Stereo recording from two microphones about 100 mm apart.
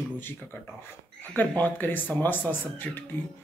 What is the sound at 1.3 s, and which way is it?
Speech, 15° left (ahead or behind).